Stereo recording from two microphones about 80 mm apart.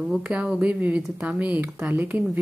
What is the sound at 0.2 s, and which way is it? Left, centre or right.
A woman's voice, centre.